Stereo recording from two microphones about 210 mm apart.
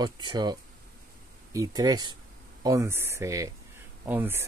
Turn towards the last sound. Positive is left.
turn(degrees=-10)  # may be behind; listen again after turning